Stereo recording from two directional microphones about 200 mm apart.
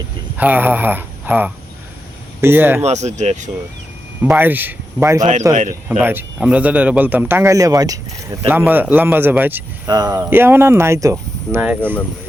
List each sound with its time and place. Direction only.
0.3 s speech: 10° right (ahead or behind)
2.8 s speech: 35° right (ahead or behind)
4.2 s speech: 10° right (ahead or behind)
5.5 s speech: 40° right (ahead or behind)
6.0 s speech: 10° right (ahead or behind)